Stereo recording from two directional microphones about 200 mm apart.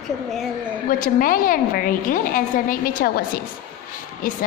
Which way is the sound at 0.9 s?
45° left (ahead or behind).